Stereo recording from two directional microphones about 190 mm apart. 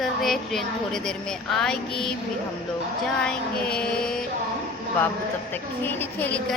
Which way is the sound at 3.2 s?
5° left (ahead or behind).